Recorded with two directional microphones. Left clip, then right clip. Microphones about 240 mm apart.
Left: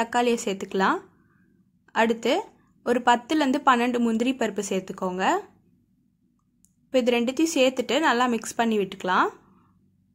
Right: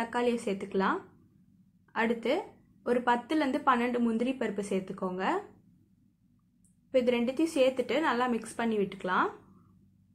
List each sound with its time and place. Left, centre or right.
0.0 s speech: left
6.9 s speech: left